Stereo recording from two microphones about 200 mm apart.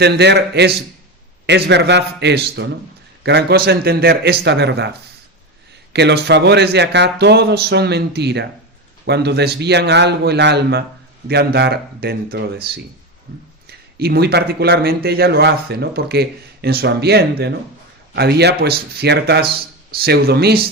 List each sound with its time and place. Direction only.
0.0 s speech: 55° right (ahead or behind)
5.9 s a man's voice: 55° right (ahead or behind)